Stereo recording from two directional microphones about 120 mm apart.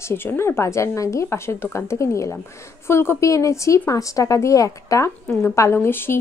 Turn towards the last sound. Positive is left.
turn(degrees=20)  # may be behind; listen again after turning